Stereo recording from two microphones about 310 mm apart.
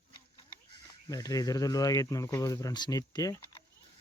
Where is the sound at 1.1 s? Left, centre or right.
Centre.